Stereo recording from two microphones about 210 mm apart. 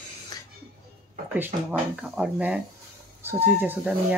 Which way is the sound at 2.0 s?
5° right (ahead or behind).